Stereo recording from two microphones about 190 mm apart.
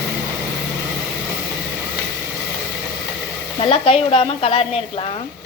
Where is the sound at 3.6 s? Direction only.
30° left (ahead or behind).